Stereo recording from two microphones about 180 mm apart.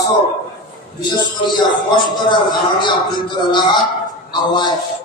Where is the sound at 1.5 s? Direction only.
25° left (ahead or behind).